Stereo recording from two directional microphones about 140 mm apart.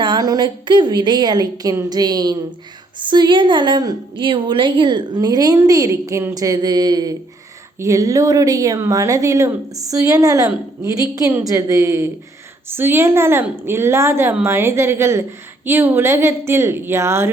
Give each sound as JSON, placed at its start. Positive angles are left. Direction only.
{"t": 0.0, "sound": "a woman's voice", "side_deg": -30}